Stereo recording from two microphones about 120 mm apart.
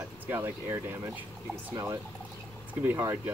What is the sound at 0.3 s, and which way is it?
Speech, 20° right (ahead or behind).